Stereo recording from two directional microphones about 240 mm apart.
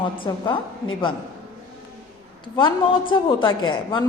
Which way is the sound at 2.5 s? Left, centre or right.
Left.